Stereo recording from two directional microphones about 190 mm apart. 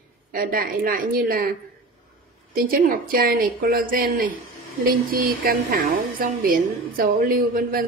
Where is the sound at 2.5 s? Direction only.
50° right (ahead or behind).